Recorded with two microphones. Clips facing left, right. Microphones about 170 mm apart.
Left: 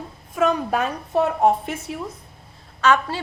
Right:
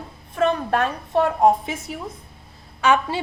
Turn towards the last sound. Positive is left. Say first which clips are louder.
# even
turn(degrees=-15)  # may be behind; listen again after turning